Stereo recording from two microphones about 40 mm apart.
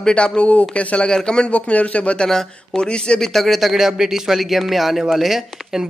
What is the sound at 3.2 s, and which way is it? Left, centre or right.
Speech, centre.